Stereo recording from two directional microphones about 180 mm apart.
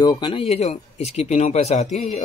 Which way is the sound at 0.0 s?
25° left (ahead or behind).